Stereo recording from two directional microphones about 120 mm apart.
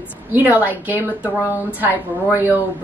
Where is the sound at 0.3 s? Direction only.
15° right (ahead or behind).